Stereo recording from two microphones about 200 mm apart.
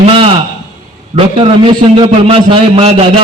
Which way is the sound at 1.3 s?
25° right (ahead or behind).